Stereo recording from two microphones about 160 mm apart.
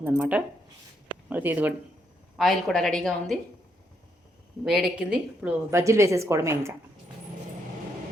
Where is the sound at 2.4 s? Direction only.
Centre (ahead or behind).